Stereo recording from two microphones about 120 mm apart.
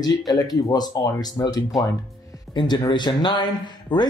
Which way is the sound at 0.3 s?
35° left (ahead or behind).